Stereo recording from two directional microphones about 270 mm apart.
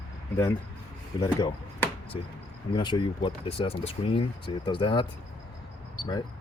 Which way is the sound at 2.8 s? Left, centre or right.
Centre.